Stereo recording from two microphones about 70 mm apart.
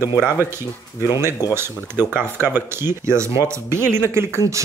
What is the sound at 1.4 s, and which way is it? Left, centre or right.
Speech, left.